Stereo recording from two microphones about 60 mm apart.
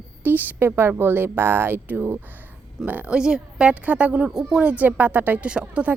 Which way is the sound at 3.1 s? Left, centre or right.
Centre.